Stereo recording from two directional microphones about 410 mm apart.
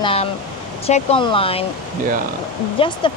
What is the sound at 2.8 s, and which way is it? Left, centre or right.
Speech, centre.